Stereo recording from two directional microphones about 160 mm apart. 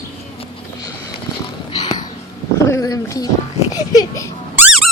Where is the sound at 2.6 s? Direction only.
20° left (ahead or behind).